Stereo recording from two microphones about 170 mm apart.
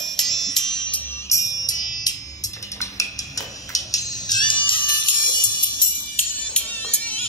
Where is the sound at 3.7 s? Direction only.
20° left (ahead or behind).